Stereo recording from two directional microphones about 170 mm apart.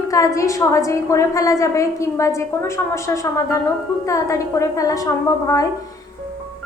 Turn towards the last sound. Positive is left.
turn(degrees=20)  # may be behind; listen again after turning